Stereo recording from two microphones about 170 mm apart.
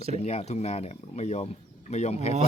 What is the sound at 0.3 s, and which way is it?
Speech, 40° left (ahead or behind).